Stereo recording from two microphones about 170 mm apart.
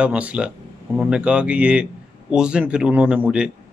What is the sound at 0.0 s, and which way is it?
Speech, 10° right (ahead or behind).